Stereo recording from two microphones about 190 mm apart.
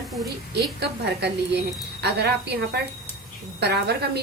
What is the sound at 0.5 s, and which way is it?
A woman's voice, 60° right (ahead or behind).